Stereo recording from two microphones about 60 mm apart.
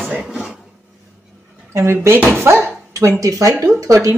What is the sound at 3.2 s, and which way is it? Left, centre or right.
Speech, right.